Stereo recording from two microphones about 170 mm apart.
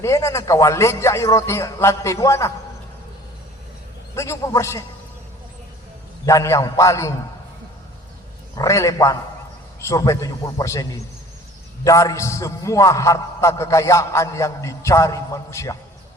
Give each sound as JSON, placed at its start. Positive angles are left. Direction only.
{"t": 0.0, "sound": "a man's voice", "side_deg": 15}
{"t": 4.1, "sound": "a man's voice", "side_deg": 15}
{"t": 6.2, "sound": "a man's voice", "side_deg": 20}
{"t": 8.5, "sound": "a man's voice", "side_deg": 20}